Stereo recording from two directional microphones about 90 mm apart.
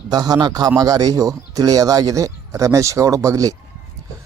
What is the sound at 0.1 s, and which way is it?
A man's voice, 50° right (ahead or behind).